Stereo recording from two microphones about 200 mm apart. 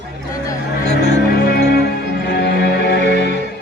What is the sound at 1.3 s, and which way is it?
Music, 55° left (ahead or behind).